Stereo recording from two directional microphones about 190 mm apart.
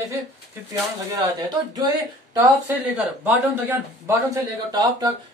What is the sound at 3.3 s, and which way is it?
A man's voice, 15° right (ahead or behind).